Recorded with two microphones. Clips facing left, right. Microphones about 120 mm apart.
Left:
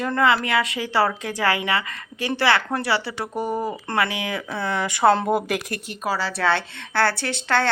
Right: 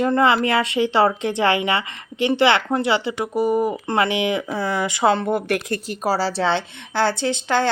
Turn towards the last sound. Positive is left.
turn(degrees=-15)  # may be behind; listen again after turning